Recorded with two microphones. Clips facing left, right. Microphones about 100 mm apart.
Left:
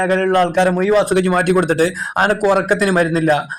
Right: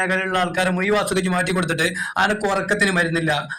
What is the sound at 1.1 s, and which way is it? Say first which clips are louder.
Speech: left 7 dB; 50° left (ahead or behind).